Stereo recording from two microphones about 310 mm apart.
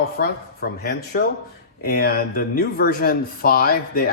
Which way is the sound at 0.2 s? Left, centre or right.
Left.